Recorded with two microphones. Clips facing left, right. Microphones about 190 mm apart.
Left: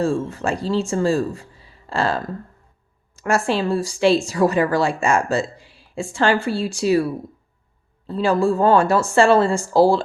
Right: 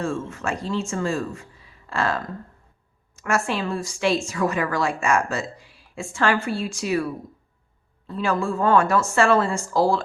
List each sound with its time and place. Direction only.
0.0 s a woman's voice: 35° left (ahead or behind)